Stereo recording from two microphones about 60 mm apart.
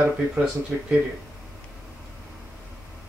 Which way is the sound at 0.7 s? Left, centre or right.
Centre.